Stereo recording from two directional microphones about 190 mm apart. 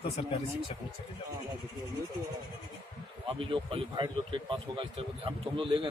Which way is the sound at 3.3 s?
30° right (ahead or behind).